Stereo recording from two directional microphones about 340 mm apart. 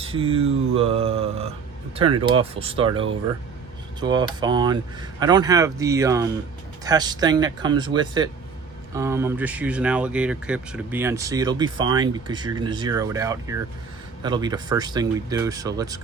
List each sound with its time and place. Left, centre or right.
0.0 s speech: centre